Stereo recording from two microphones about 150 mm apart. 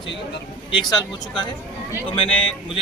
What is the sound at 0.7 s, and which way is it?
Speech, 30° left (ahead or behind).